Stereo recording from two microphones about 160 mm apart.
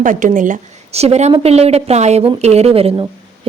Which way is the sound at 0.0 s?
55° right (ahead or behind).